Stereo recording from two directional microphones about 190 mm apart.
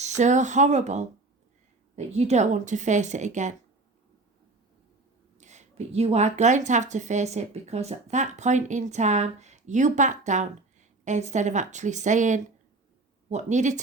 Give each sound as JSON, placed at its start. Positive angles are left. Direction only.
{"t": 0.0, "sound": "speech", "side_deg": -40}
{"t": 5.4, "sound": "speech", "side_deg": -40}